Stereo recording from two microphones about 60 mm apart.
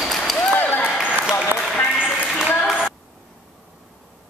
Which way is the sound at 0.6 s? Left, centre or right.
Left.